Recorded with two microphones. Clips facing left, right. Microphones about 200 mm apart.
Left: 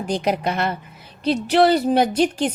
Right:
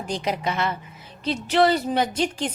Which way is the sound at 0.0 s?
60° left (ahead or behind).